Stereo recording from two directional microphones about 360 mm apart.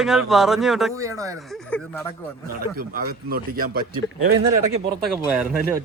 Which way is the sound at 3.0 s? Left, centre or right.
Right.